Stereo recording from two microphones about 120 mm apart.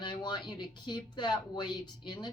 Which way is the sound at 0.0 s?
40° left (ahead or behind).